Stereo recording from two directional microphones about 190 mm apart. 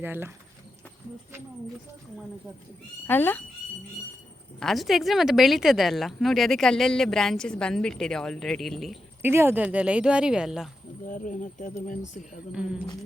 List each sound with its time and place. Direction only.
0.0 s speech: 10° right (ahead or behind)
3.1 s speech: 10° left (ahead or behind)
4.6 s speech: centre (ahead or behind)
9.2 s speech: 10° right (ahead or behind)
11.0 s speech: 40° left (ahead or behind)